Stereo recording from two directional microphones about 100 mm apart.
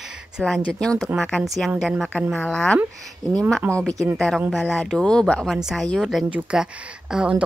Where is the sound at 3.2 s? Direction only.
40° right (ahead or behind).